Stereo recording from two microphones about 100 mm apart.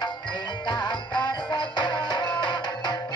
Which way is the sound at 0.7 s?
50° left (ahead or behind).